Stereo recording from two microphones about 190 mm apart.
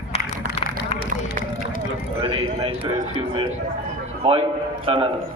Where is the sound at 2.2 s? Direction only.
30° right (ahead or behind).